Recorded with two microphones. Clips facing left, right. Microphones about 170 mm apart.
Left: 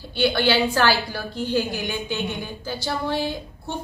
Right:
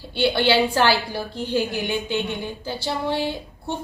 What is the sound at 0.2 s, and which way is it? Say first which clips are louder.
A woman's voice: right 1 dB; 25° right (ahead or behind).